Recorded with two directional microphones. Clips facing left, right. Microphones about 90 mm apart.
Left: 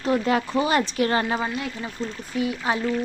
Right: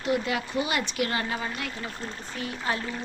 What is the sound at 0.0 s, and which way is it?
Speech, 40° left (ahead or behind).